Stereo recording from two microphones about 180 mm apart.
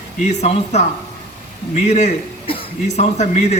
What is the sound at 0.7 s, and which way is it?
A man's voice, 40° left (ahead or behind).